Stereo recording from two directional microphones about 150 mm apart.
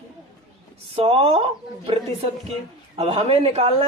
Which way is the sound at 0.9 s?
40° right (ahead or behind).